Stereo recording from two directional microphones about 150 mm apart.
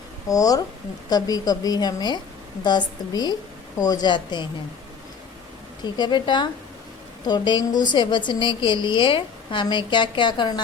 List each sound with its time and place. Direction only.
0.3 s a woman's voice: 25° left (ahead or behind)
5.8 s a woman's voice: 30° left (ahead or behind)